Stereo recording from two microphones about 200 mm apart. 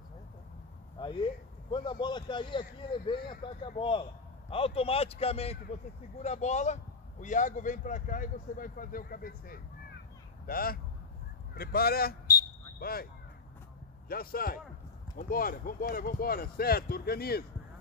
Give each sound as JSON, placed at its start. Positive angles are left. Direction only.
{"t": 0.9, "sound": "a man's voice", "side_deg": 25}